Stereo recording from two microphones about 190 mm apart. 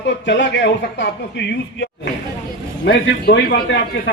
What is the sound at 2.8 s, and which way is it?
Speech, 65° left (ahead or behind).